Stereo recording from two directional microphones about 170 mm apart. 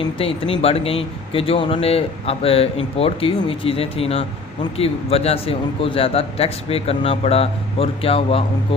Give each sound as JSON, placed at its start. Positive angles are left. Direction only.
{"t": 0.2, "sound": "speech", "side_deg": 35}